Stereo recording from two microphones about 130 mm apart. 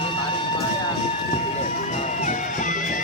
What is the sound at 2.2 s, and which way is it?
Music, 75° left (ahead or behind).